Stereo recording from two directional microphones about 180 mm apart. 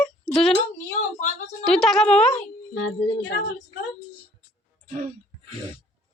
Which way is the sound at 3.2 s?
90° left.